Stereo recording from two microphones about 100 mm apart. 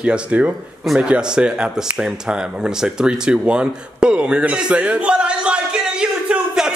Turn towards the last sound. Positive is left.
turn(degrees=-5)  # may be behind; listen again after turning